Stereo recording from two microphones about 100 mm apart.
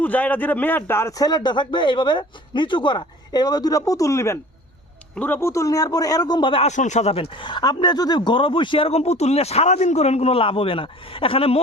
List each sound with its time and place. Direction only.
0.0 s a man's voice: 15° left (ahead or behind)
1.1 s a man's voice: 40° left (ahead or behind)
5.1 s a man's voice: 20° left (ahead or behind); by 6.5 s 45° left (ahead or behind)
6.5 s speech: 90° left